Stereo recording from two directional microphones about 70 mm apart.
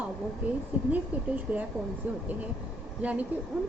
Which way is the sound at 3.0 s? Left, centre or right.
Right.